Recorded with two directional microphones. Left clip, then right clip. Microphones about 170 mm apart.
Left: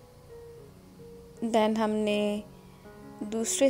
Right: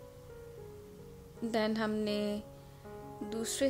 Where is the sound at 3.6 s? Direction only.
10° left (ahead or behind).